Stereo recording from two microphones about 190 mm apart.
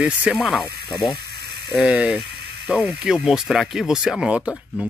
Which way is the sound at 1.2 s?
55° right (ahead or behind).